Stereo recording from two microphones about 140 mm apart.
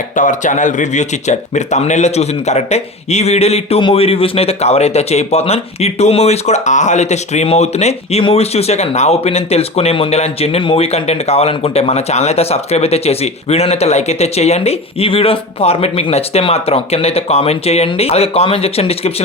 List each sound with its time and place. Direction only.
0.2 s speech: 65° left (ahead or behind); by 19.1 s 45° left (ahead or behind)